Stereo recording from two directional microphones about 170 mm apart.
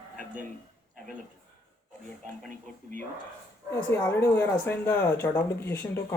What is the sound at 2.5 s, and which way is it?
Speech, 50° right (ahead or behind).